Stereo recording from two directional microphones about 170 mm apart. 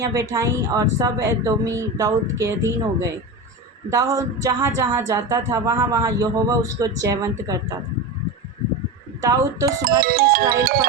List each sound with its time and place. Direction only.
0.0 s speech: 20° right (ahead or behind)
9.2 s speech: 20° right (ahead or behind)
9.8 s speech: 60° right (ahead or behind)